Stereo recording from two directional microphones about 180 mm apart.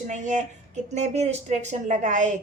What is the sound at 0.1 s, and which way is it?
A woman's voice, 45° right (ahead or behind).